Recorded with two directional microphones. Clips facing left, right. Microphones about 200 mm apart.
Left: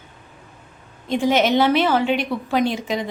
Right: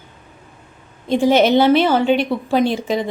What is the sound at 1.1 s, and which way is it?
A woman's voice, 30° right (ahead or behind).